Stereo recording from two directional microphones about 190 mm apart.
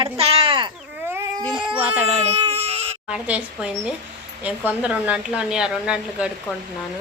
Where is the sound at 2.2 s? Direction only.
35° right (ahead or behind).